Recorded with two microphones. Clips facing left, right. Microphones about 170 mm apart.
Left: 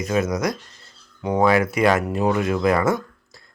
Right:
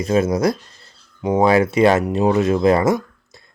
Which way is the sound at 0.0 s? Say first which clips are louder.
Right 5 dB; 30° right (ahead or behind).